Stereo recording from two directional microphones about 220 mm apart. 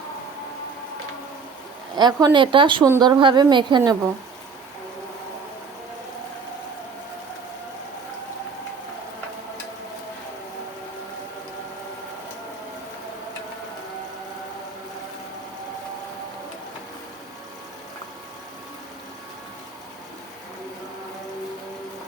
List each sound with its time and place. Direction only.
2.0 s a woman's voice: 20° right (ahead or behind)